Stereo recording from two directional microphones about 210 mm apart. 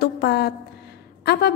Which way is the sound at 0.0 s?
50° left (ahead or behind).